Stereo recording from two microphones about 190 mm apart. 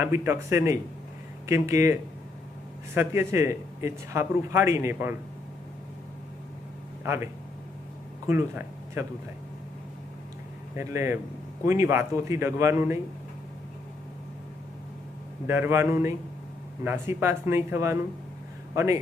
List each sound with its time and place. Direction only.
0.0 s speech: 15° right (ahead or behind)
7.0 s speech: 15° right (ahead or behind)
8.3 s speech: 15° right (ahead or behind)
10.8 s speech: 15° right (ahead or behind)
15.4 s speech: 15° right (ahead or behind)